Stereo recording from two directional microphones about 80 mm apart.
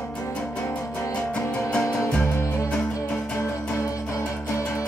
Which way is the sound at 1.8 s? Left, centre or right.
Left.